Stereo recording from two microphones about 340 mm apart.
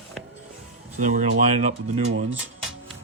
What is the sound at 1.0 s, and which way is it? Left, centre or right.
Speech, right.